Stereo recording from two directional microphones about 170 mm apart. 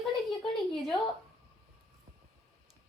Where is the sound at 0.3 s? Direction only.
Centre (ahead or behind).